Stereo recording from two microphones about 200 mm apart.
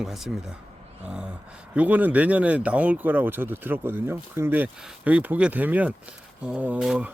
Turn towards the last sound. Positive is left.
turn(degrees=-5)  # may be behind; listen again after turning